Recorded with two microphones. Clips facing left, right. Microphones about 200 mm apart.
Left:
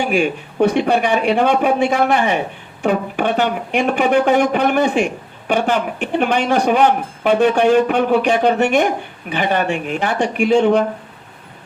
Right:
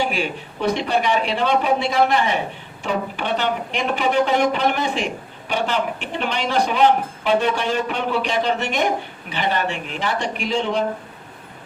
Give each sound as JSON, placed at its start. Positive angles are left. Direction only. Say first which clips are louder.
{"t": 0.0, "sound": "a man's voice", "louder": "left 6 dB", "side_deg": 50}